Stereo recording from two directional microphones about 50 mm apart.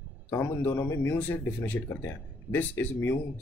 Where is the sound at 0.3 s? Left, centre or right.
Left.